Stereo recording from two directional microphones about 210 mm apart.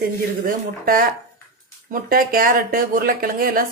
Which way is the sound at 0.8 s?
45° right (ahead or behind).